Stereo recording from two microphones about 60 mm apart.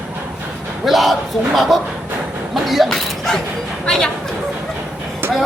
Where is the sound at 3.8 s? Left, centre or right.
Centre.